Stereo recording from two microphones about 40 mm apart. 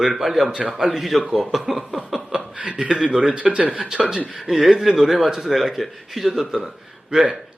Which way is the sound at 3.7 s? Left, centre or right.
Centre.